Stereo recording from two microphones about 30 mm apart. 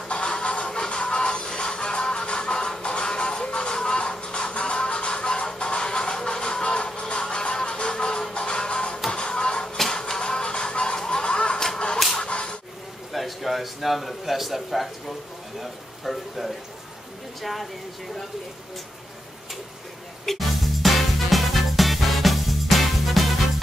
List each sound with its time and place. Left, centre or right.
0.1 s music: left
11.0 s a sound: left
11.2 s a sound: left
12.3 s whip: left
13.1 s a man's voice: centre
20.2 s music: centre